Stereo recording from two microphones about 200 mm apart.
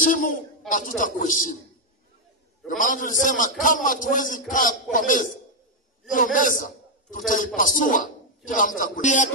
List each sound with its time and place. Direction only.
0.0 s a man's voice: 40° left (ahead or behind)
2.8 s a man's voice: 40° left (ahead or behind)